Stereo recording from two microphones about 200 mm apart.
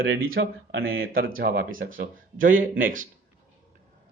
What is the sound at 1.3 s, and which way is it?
Speech, 45° right (ahead or behind).